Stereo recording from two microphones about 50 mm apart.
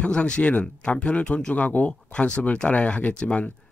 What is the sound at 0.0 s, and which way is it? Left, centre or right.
Speech, left.